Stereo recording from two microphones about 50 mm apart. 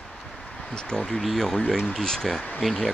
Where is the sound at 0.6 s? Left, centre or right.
Centre.